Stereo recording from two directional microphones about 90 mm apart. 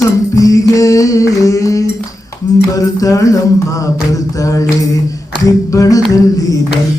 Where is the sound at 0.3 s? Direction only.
40° left (ahead or behind).